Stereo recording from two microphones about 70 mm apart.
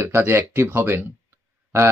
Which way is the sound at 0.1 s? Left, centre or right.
Right.